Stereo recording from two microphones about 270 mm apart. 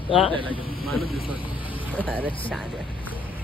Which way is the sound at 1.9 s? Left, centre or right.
Centre.